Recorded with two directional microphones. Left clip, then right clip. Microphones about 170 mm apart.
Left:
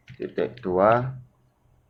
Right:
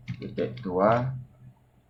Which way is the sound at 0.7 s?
50° left (ahead or behind).